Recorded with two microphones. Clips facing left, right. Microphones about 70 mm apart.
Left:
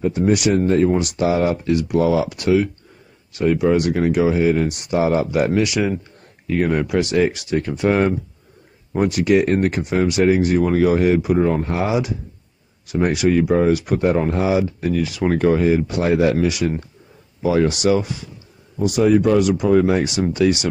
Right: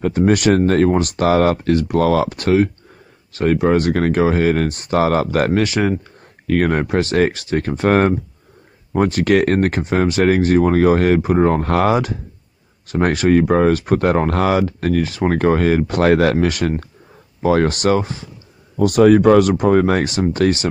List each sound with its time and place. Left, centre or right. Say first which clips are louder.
0.0 s speech: right 2 dB; right
2.2 s speech: right 2 dB; right
3.9 s speech: right 1 dB; right
4.6 s speech: right 2 dB; right
4.9 s speech: right 2 dB; right
6.4 s speech: right 2 dB; right
6.9 s speech: right 1 dB; right
7.4 s speech: right 1 dB; right
8.9 s speech: right 1 dB; right
11.6 s speech: right 5 dB; right